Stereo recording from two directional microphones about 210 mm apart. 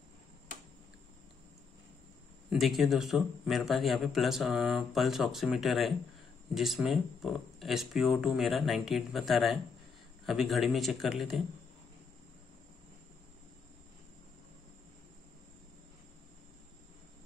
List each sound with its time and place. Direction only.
2.5 s a man's voice: centre (ahead or behind)